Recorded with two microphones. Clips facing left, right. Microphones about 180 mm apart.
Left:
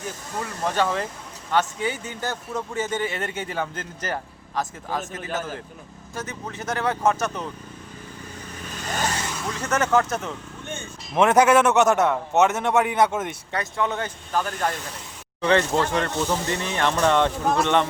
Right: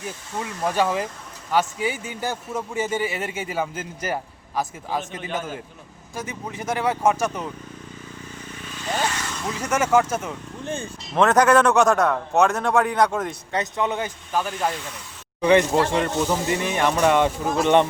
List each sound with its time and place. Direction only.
0.6 s speech: 10° right (ahead or behind)
8.8 s vehicle: 40° left (ahead or behind)
9.6 s speech: 10° right (ahead or behind)
10.6 s speech: 35° right (ahead or behind)
11.1 s a man's voice: 10° left (ahead or behind)
13.5 s speech: 20° right (ahead or behind)
15.7 s speech: 30° right (ahead or behind)
16.0 s speech: 10° right (ahead or behind)